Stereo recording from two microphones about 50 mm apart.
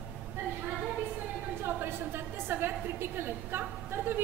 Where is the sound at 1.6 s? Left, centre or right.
Right.